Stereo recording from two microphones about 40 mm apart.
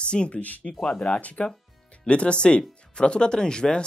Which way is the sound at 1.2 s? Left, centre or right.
Left.